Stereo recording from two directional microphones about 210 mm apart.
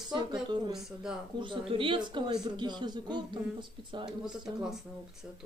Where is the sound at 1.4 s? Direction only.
25° right (ahead or behind).